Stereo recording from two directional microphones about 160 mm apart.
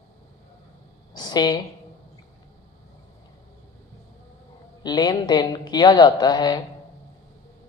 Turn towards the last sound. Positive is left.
turn(degrees=25)  # may be behind; listen again after turning